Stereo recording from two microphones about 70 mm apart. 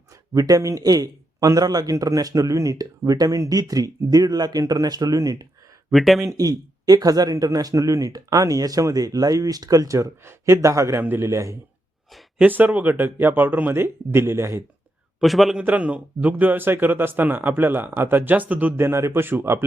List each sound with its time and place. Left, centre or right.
0.3 s a man's voice: right
5.9 s a man's voice: centre
6.2 s a man's voice: right
12.4 s speech: right
15.2 s a man's voice: centre
15.6 s speech: right
18.8 s a man's voice: right